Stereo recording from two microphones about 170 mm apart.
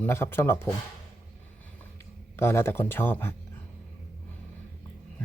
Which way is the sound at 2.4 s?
15° left (ahead or behind).